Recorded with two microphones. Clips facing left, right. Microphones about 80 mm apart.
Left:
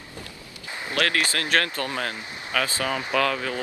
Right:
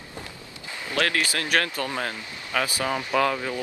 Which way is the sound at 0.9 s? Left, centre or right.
Right.